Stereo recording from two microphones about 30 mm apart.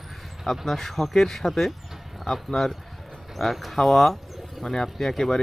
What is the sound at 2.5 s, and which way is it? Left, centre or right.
Speech, centre.